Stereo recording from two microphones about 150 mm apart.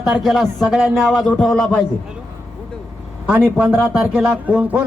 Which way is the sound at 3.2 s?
10° right (ahead or behind).